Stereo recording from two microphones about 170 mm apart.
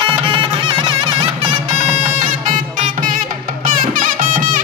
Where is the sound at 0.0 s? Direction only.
30° right (ahead or behind).